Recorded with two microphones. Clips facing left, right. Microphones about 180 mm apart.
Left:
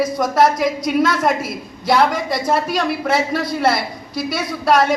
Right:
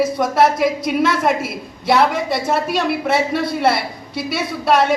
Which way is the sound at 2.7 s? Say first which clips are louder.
Right 1 dB; 25° right (ahead or behind).